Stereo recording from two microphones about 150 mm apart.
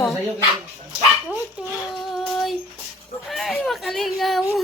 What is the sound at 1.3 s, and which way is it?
Speech, 5° right (ahead or behind).